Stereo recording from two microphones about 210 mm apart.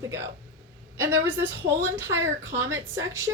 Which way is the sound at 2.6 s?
15° right (ahead or behind).